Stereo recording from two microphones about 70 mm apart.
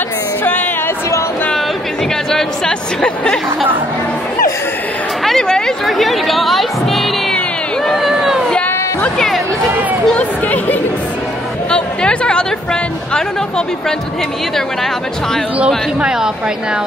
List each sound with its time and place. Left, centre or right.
0.4 s music: left
2.3 s speech: centre
5.2 s chatter: centre
5.9 s speech: centre
7.8 s a sound: centre
10.0 s speech: centre
11.7 s chatter: centre
13.1 s speech: centre
16.0 s a woman's voice: centre